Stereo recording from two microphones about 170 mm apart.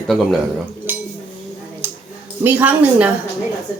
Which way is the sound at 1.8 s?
10° right (ahead or behind).